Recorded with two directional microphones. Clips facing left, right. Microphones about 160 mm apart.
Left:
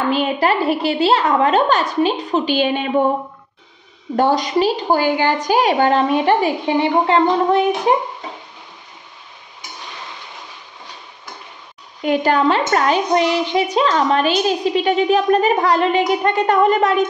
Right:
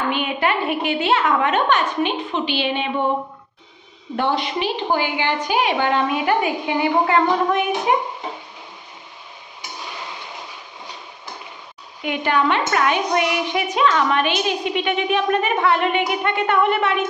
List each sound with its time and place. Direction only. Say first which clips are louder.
0.1 s a woman's voice: left 4 dB; 35° left (ahead or behind)
4.2 s a woman's voice: left 6 dB; 40° left (ahead or behind)
12.0 s a woman's voice: left 5 dB; 40° left (ahead or behind)